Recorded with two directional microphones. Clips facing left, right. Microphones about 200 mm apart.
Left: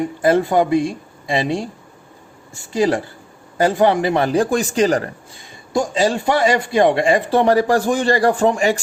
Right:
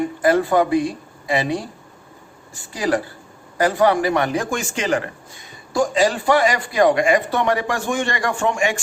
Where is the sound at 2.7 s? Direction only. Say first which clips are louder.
Left 4 dB; 25° left (ahead or behind).